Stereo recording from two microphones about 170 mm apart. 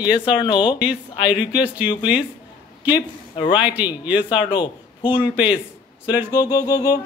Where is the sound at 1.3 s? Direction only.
5° right (ahead or behind).